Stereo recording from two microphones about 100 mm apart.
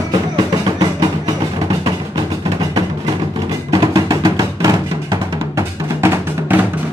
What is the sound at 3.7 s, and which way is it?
Music, 40° right (ahead or behind).